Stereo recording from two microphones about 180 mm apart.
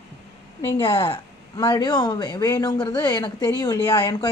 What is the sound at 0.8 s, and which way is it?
Speech, 25° left (ahead or behind).